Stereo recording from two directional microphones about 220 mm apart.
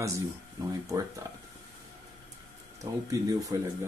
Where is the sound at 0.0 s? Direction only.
15° right (ahead or behind).